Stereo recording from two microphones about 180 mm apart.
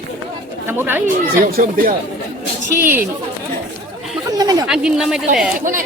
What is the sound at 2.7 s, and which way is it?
Speech, 10° right (ahead or behind).